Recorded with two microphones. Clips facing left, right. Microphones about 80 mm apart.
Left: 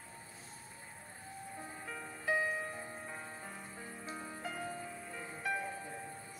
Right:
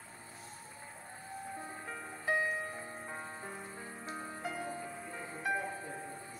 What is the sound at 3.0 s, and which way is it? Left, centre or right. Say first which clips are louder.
Music: right 2 dB; right.